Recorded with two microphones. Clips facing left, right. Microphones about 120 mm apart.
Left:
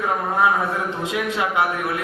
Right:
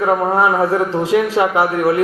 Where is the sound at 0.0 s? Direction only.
40° right (ahead or behind).